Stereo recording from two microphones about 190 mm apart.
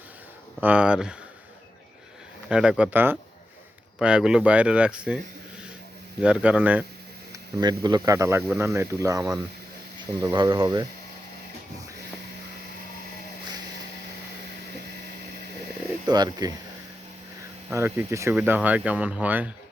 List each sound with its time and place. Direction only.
0.6 s speech: 5° right (ahead or behind)
2.5 s speech: 5° right (ahead or behind)
6.2 s speech: 5° right (ahead or behind)
7.3 s speech: 20° right (ahead or behind)
16.0 s speech: 20° right (ahead or behind)
17.7 s speech: 10° right (ahead or behind)